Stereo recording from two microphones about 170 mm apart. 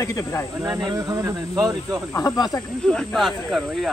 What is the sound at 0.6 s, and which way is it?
Speech, 20° right (ahead or behind).